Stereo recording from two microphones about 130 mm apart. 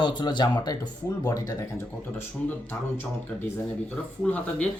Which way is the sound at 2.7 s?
15° left (ahead or behind).